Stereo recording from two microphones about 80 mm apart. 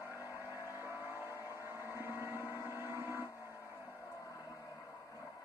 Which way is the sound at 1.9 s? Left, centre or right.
Right.